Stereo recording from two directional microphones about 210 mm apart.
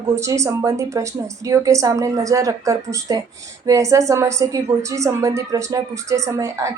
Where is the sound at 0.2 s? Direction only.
15° right (ahead or behind).